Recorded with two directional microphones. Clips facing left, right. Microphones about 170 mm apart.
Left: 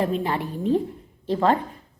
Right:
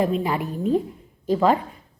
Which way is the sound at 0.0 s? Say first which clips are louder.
Right 2 dB; 10° right (ahead or behind).